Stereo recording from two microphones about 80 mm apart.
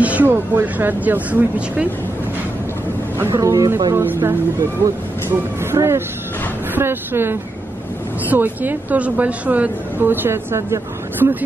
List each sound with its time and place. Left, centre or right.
0.0 s a woman's voice: centre
3.2 s speech: right
3.9 s a woman's voice: right